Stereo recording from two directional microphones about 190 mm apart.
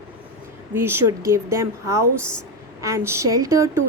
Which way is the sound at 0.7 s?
10° right (ahead or behind).